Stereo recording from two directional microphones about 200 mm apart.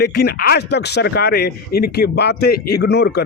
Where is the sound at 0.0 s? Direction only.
50° left (ahead or behind).